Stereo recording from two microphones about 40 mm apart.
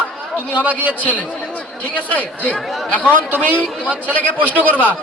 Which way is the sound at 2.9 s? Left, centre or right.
Left.